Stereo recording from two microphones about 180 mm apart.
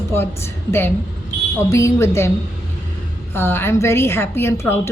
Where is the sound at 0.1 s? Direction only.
10° left (ahead or behind).